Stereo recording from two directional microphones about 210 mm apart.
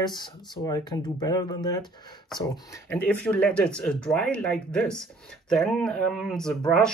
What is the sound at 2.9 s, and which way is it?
Speech, 10° left (ahead or behind).